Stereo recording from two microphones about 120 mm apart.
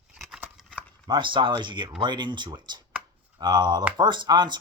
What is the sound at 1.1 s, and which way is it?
Speech, 40° right (ahead or behind).